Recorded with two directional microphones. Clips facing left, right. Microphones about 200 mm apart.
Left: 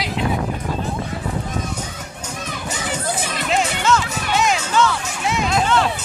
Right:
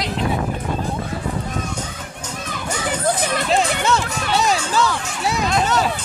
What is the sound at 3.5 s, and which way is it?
Music, 35° right (ahead or behind).